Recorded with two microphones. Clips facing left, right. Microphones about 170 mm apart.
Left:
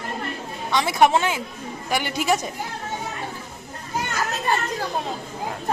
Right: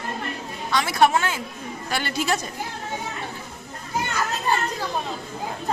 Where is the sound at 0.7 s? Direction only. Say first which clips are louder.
Left 1 dB; 20° left (ahead or behind).